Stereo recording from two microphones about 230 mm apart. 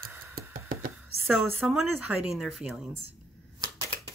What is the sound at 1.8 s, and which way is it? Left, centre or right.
Speech, left.